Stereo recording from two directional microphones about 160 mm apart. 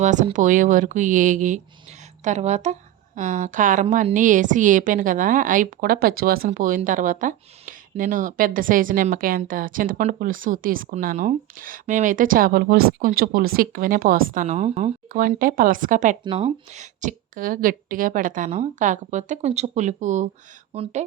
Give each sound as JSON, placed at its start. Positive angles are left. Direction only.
{"t": 0.0, "sound": "a woman's voice", "side_deg": -50}
{"t": 13.1, "sound": "a woman's voice", "side_deg": -60}
{"t": 16.2, "sound": "a woman's voice", "side_deg": -35}